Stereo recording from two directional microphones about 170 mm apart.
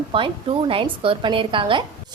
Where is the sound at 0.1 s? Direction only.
30° right (ahead or behind).